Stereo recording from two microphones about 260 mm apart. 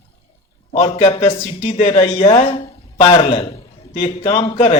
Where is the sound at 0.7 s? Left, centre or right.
Left.